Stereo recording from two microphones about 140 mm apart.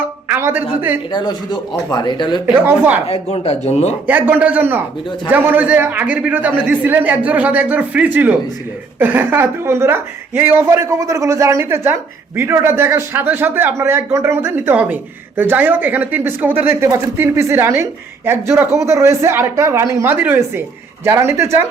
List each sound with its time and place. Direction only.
0.3 s a man's voice: 15° right (ahead or behind)
1.1 s speech: 30° left (ahead or behind)
2.5 s a man's voice: 10° right (ahead or behind)
3.1 s speech: 50° left (ahead or behind)
4.0 s a man's voice: 10° right (ahead or behind)